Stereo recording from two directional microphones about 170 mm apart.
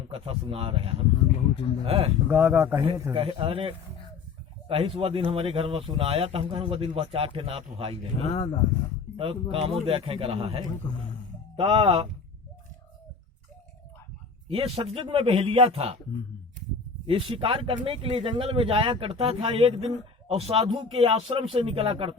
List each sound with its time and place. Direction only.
0.1 s speech: 35° right (ahead or behind)
1.1 s speech: 35° left (ahead or behind)
1.8 s speech: 30° right (ahead or behind)
2.2 s speech: 10° right (ahead or behind)
3.1 s speech: 30° right (ahead or behind)
8.3 s speech: 35° left (ahead or behind)
9.1 s speech: 30° right (ahead or behind)
14.4 s speech: 35° right (ahead or behind)
17.1 s speech: 30° right (ahead or behind)